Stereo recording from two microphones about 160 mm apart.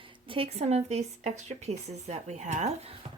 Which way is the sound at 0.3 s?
40° right (ahead or behind).